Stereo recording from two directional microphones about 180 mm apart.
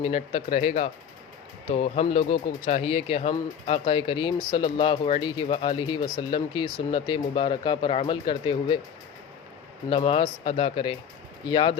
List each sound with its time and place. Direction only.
0.0 s speech: 35° left (ahead or behind)
9.9 s speech: 30° left (ahead or behind)